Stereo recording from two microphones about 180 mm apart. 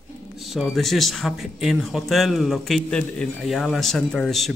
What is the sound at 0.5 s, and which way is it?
Speech, centre (ahead or behind).